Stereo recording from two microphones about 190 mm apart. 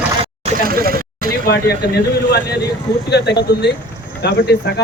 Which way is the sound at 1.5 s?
60° left (ahead or behind).